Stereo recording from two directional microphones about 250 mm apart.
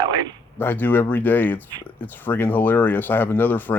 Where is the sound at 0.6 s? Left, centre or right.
Centre.